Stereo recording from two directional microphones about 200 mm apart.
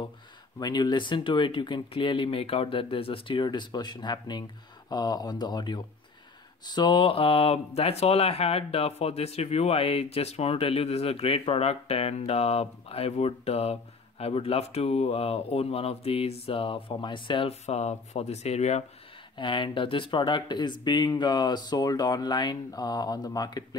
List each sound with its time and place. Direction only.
0.6 s speech: 20° left (ahead or behind)